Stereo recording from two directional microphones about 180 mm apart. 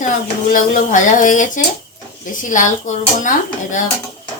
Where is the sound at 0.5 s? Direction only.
45° left (ahead or behind).